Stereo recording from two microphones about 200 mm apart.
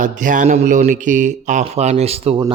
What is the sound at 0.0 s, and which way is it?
A man's voice, 40° right (ahead or behind).